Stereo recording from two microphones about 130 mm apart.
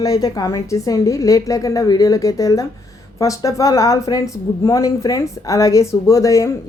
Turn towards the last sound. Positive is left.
turn(degrees=25)  # may be behind; listen again after turning